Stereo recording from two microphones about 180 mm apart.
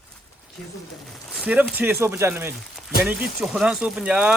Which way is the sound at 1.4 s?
10° right (ahead or behind).